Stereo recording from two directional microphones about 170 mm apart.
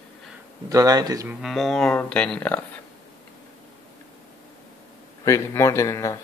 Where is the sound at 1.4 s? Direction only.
Centre (ahead or behind).